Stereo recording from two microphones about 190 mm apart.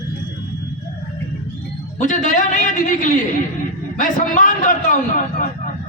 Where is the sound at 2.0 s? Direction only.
45° left (ahead or behind).